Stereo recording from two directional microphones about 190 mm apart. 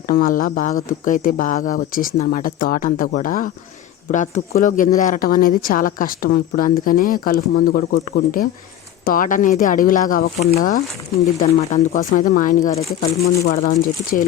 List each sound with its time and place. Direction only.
0.1 s speech: 45° left (ahead or behind)
13.5 s speech: 45° left (ahead or behind)